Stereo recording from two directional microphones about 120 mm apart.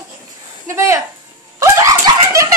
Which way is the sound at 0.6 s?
25° right (ahead or behind).